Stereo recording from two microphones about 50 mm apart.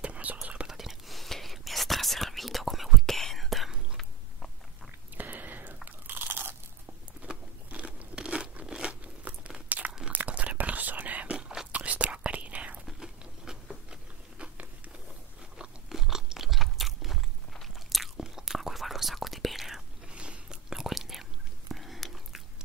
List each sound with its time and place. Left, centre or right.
0.0 s whispering: right
0.7 s whispering: centre
5.1 s whispering: right
5.9 s crunch: right
7.2 s crunch: right
9.7 s crunch: right
10.1 s whispering: right
12.8 s biting: centre
15.9 s chewing: centre
17.9 s whispering: centre
20.1 s biting: right
20.9 s whispering: centre